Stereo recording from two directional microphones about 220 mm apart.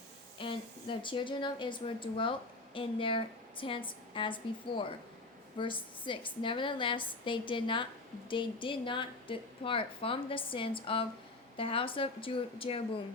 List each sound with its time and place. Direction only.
0.3 s a woman's voice: 25° left (ahead or behind)